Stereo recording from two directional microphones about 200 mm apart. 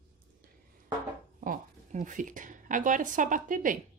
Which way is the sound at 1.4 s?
40° right (ahead or behind).